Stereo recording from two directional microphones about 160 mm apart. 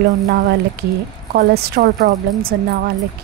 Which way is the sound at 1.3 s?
80° right.